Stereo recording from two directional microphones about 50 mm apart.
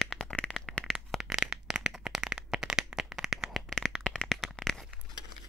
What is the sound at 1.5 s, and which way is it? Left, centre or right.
Clapping, centre.